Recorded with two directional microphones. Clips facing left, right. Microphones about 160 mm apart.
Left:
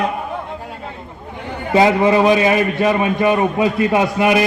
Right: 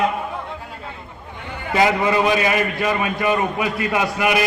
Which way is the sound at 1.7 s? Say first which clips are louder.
Left 5 dB; 25° left (ahead or behind).